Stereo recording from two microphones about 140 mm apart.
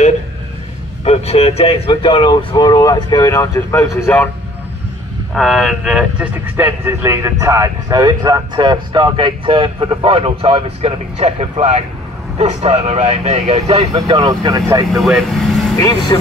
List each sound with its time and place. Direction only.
1.0 s speech: 50° left (ahead or behind); by 4.3 s 15° left (ahead or behind)
5.3 s speech: centre (ahead or behind); by 13.8 s 50° right (ahead or behind)
13.9 s speech: 30° right (ahead or behind)
14.9 s speech: centre (ahead or behind)
15.8 s speech: 30° left (ahead or behind)